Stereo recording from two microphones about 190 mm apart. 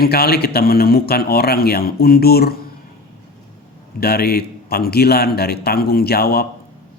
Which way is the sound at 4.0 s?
55° left (ahead or behind).